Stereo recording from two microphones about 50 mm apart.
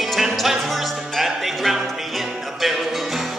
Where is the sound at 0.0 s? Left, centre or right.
Centre.